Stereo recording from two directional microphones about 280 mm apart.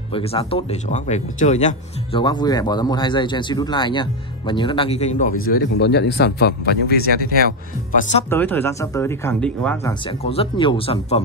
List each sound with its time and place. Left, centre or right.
0.1 s speech: centre
5.5 s speech: left
8.3 s speech: centre
10.2 s speech: left